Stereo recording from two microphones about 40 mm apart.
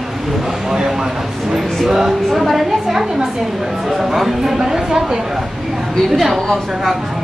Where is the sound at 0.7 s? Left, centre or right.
Centre.